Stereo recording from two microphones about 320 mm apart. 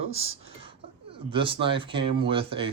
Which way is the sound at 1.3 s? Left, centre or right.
Centre.